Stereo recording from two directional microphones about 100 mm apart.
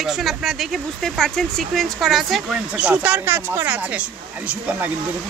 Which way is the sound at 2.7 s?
15° right (ahead or behind).